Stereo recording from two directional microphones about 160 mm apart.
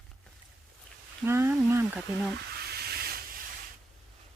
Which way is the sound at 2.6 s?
80° right.